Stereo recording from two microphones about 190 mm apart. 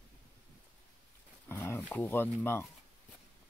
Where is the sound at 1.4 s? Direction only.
15° left (ahead or behind).